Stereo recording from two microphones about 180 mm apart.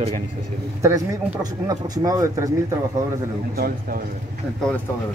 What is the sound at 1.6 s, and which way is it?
Speech, 20° right (ahead or behind).